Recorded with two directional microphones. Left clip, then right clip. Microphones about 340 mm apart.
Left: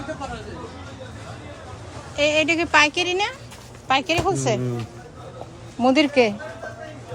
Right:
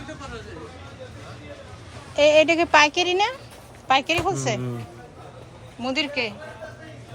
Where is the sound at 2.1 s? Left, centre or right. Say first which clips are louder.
Right 3 dB; centre.